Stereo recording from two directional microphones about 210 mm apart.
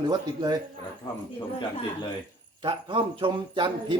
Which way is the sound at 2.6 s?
25° right (ahead or behind).